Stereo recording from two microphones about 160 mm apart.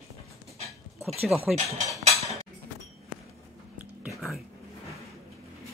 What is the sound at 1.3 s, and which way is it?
Cutlery, 10° right (ahead or behind).